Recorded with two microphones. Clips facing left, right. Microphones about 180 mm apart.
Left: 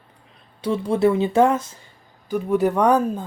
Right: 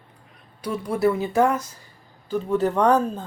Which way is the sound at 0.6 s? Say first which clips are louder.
Left 4 dB; 25° left (ahead or behind).